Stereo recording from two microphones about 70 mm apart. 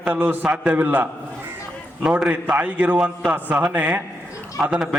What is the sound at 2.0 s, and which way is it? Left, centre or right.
Speech, centre.